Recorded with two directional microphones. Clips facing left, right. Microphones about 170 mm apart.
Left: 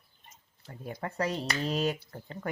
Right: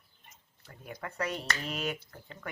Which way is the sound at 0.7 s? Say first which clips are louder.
Left 5 dB; 30° left (ahead or behind).